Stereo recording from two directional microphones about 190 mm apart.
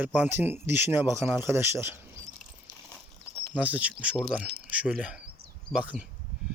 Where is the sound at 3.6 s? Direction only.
5° right (ahead or behind).